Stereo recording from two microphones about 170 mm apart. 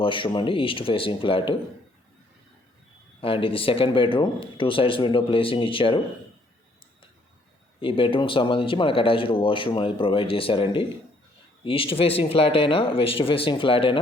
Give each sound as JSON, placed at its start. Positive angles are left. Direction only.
{"t": 0.0, "sound": "speech", "side_deg": 30}
{"t": 3.2, "sound": "speech", "side_deg": 30}
{"t": 7.8, "sound": "speech", "side_deg": 30}